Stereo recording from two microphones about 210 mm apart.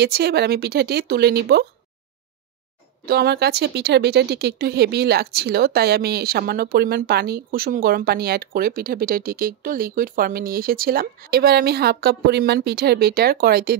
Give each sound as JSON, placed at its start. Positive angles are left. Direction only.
{"t": 0.0, "sound": "speech", "side_deg": -50}
{"t": 3.1, "sound": "speech", "side_deg": -50}